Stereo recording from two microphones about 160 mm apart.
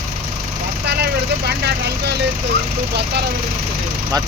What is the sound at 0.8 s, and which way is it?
Speech, 90° right.